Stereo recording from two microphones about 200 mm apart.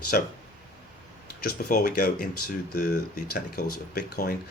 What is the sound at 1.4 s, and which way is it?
Speech, 45° left (ahead or behind).